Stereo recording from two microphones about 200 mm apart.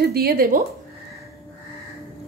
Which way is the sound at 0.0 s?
50° right (ahead or behind).